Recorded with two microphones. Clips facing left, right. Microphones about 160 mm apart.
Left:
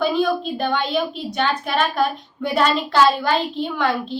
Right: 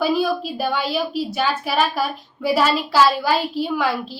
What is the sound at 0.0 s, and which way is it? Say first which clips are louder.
A woman's voice: even; 5° right (ahead or behind).